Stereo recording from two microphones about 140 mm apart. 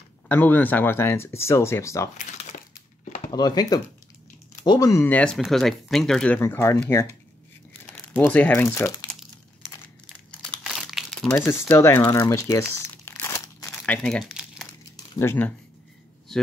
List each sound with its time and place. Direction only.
0.3 s speech: 10° left (ahead or behind)
3.3 s speech: 30° left (ahead or behind)
5.0 s speech: 10° left (ahead or behind)
7.9 s speech: 15° left (ahead or behind)
9.6 s crumpling: 5° left (ahead or behind)
11.4 s speech: 20° left (ahead or behind)
11.8 s crumpling: 20° left (ahead or behind)
13.7 s speech: 5° left (ahead or behind)
14.3 s crumpling: 5° right (ahead or behind)
15.1 s speech: 15° left (ahead or behind)